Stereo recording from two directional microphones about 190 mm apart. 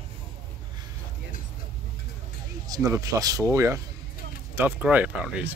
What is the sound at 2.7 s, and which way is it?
Speech, 15° right (ahead or behind).